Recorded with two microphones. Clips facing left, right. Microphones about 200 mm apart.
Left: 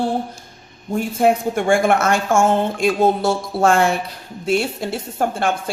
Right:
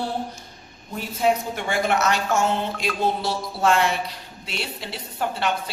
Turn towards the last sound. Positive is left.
turn(degrees=50)  # may be behind; listen again after turning